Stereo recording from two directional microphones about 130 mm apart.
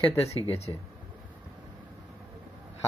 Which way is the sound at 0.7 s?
30° left (ahead or behind).